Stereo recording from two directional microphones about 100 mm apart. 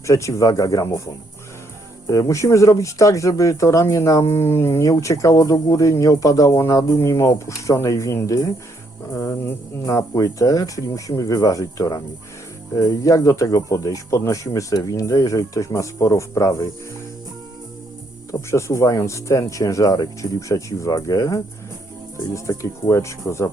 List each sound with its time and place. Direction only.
0.1 s speech: 30° left (ahead or behind)
2.0 s speech: 35° left (ahead or behind)
10.0 s speech: 40° left (ahead or behind)
18.3 s speech: 30° left (ahead or behind)
22.4 s speech: 30° left (ahead or behind)